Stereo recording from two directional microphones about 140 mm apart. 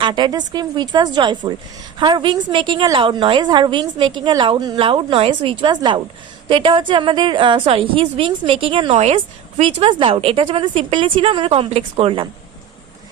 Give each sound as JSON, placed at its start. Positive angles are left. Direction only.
{"t": 0.0, "sound": "a woman's voice", "side_deg": -30}